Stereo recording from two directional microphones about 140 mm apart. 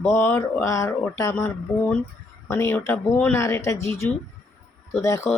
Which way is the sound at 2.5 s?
20° left (ahead or behind).